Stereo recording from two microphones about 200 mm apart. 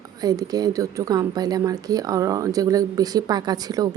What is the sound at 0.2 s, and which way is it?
A woman's voice, 20° right (ahead or behind).